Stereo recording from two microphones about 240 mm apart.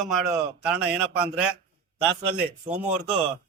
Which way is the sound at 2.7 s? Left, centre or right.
Right.